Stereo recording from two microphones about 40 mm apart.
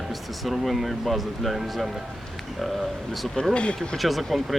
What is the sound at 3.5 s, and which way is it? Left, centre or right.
Speech, left.